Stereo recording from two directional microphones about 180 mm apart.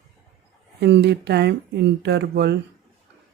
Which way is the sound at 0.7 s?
70° right (ahead or behind).